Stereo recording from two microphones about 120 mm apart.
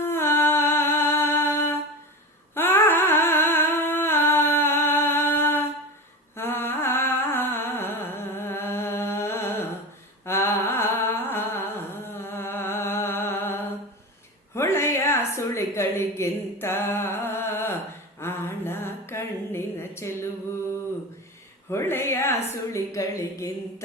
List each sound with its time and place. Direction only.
0.0 s music: 20° left (ahead or behind)
2.6 s humming: 20° left (ahead or behind)
6.3 s music: 20° left (ahead or behind)
10.2 s humming: 20° left (ahead or behind)
14.5 s a sound: 20° left (ahead or behind)
18.2 s mantra: 20° left (ahead or behind)
21.7 s a sound: 20° left (ahead or behind)